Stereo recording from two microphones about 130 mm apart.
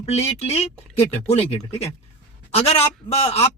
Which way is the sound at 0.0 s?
55° left (ahead or behind).